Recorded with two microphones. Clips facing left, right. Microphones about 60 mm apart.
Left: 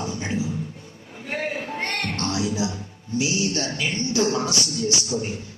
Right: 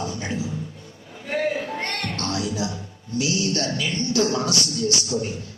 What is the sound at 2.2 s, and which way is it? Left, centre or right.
A man's voice, left.